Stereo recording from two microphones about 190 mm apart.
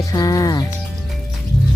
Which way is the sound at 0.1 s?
20° left (ahead or behind).